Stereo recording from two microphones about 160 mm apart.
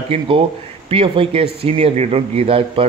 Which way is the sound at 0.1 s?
45° right (ahead or behind).